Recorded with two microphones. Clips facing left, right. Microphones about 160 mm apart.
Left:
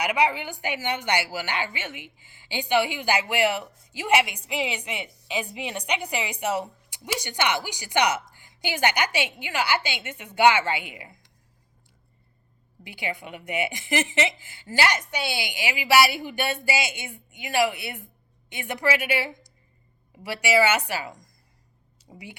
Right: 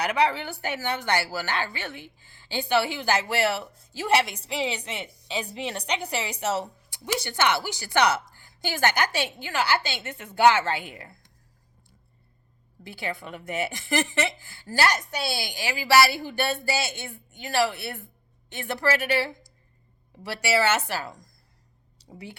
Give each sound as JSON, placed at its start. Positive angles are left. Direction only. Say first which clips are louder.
{"t": 0.0, "sound": "a woman's voice", "louder": "even", "side_deg": 10}
{"t": 12.8, "sound": "a woman's voice", "louder": "even", "side_deg": 15}